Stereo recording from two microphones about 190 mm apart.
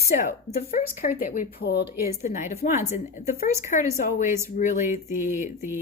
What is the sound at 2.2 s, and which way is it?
Speech, 40° left (ahead or behind).